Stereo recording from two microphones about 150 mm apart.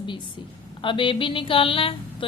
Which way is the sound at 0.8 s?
35° left (ahead or behind).